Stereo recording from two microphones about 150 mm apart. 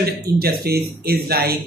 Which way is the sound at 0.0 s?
90° right.